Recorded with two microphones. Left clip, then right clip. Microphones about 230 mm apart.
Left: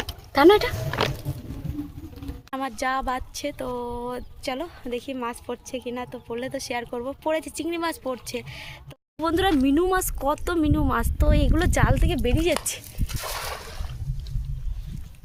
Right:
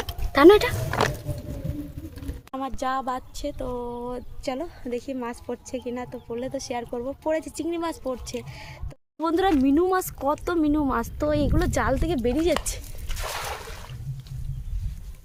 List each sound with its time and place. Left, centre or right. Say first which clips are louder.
0.3 s speech: right 2 dB; centre
0.9 s patter: right 1 dB; right
2.5 s a woman's voice: left 1 dB; centre
3.4 s speech: left 1 dB; centre
13.1 s a sound: even; centre